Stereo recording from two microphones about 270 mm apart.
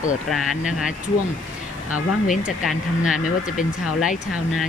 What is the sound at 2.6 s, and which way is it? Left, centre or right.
Speech, centre.